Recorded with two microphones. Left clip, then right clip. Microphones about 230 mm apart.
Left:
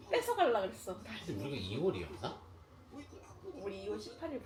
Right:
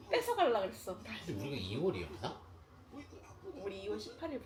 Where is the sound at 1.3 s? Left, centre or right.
Centre.